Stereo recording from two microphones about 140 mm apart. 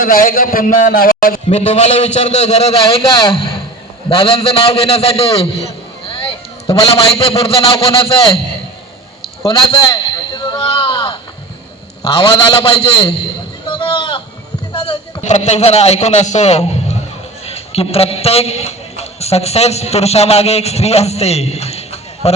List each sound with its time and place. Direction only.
0.0 s a man's voice: 80° left
1.5 s a man's voice: 50° left (ahead or behind)
9.9 s a sound: 35° left (ahead or behind)
12.0 s a man's voice: 35° left (ahead or behind)
13.7 s sheep: 35° left (ahead or behind)
14.7 s a sound: 35° left (ahead or behind)
15.2 s a man's voice: 55° left (ahead or behind)